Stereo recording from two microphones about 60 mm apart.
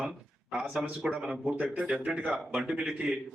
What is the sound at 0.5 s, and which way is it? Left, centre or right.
A man's voice, centre.